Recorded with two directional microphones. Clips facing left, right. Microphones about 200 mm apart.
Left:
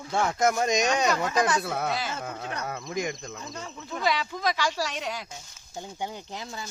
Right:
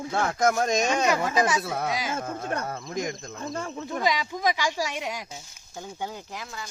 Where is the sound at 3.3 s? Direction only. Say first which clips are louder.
Right 6 dB; 50° right (ahead or behind).